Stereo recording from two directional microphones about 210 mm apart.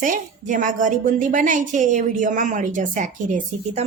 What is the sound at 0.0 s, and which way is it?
A woman's voice, 40° right (ahead or behind).